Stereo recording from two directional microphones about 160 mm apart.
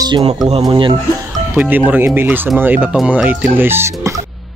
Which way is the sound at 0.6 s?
30° right (ahead or behind).